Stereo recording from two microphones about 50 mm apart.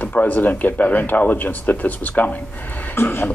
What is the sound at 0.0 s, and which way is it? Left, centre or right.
Speech, left.